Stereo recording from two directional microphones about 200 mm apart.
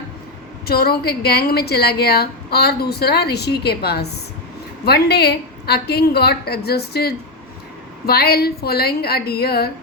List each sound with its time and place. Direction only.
0.7 s a woman's voice: 50° left (ahead or behind)